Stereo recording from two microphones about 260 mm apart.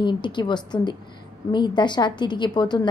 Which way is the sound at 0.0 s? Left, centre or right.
Centre.